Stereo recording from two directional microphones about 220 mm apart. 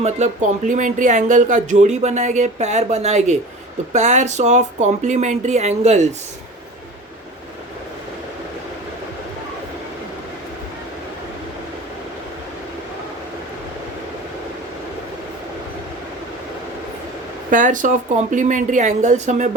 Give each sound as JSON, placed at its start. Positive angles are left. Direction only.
{"t": 0.0, "sound": "speech", "side_deg": -35}
{"t": 17.5, "sound": "speech", "side_deg": -35}